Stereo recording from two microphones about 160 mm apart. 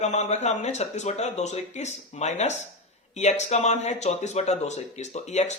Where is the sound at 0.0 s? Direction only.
45° left (ahead or behind).